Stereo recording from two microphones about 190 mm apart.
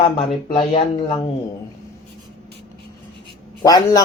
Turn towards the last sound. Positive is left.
turn(degrees=20)  # may be behind; listen again after turning